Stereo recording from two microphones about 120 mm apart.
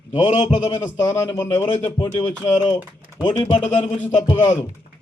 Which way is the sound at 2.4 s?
40° left (ahead or behind).